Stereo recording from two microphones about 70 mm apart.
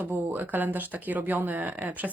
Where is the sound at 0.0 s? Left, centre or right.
Right.